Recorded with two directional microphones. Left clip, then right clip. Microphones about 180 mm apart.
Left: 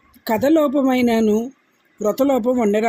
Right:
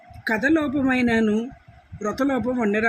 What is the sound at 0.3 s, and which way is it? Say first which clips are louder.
Speech: left 5 dB; 20° left (ahead or behind).